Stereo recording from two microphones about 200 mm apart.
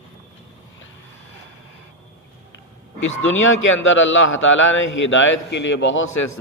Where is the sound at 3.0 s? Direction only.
75° left (ahead or behind).